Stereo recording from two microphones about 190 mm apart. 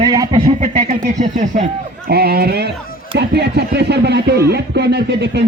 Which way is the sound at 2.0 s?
55° right (ahead or behind).